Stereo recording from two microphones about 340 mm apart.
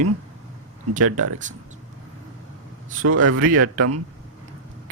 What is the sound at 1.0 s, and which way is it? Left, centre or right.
Speech, right.